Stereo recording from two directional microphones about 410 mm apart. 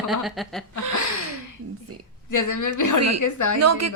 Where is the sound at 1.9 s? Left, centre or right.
Right.